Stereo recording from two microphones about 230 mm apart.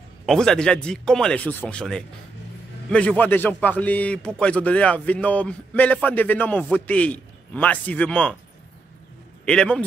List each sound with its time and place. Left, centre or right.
0.3 s a man's voice: centre
9.5 s speech: centre